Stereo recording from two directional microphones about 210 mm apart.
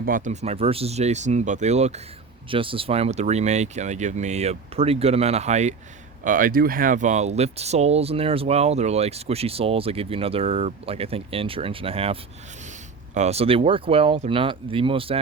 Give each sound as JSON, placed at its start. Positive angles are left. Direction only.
{"t": 0.0, "sound": "speech", "side_deg": -40}
{"t": 13.1, "sound": "speech", "side_deg": -30}